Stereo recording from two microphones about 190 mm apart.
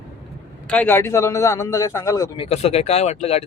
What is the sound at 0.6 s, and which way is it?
A man's voice, 10° left (ahead or behind).